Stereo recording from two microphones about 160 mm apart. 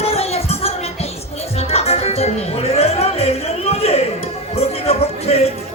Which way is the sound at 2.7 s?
40° left (ahead or behind).